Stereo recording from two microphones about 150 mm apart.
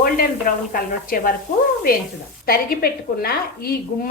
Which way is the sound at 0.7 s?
70° left (ahead or behind).